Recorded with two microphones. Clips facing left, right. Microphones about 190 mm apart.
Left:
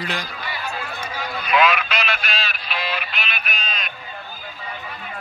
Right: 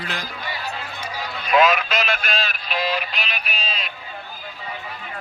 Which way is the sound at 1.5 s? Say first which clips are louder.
Right 2 dB; 40° right (ahead or behind).